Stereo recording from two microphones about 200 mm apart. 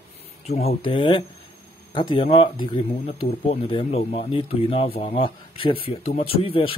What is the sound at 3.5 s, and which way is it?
Speech, 25° left (ahead or behind).